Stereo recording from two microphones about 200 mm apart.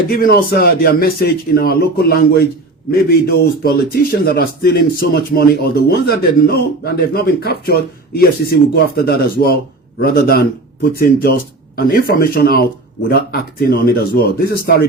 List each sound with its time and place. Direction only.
0.1 s a man's voice: 50° left (ahead or behind)